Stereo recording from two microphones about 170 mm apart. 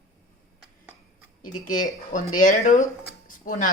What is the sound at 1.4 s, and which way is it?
Speech, 50° left (ahead or behind).